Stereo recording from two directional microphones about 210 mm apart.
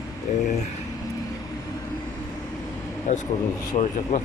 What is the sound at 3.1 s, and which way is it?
Speech, 35° left (ahead or behind).